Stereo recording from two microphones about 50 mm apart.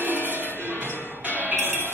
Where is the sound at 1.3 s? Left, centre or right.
Left.